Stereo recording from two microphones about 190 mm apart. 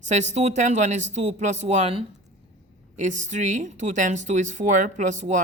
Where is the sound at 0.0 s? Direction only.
35° right (ahead or behind).